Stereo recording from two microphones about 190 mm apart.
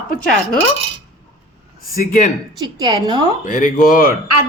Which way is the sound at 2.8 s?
20° right (ahead or behind).